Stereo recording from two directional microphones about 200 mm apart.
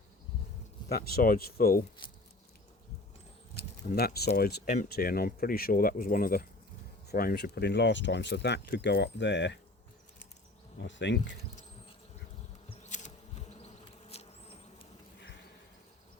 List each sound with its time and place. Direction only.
0.9 s speech: 50° left (ahead or behind)
3.5 s a sound: 50° left (ahead or behind)
4.4 s speech: 50° left (ahead or behind)
10.8 s speech: 65° left (ahead or behind)
12.8 s bee: 35° left (ahead or behind)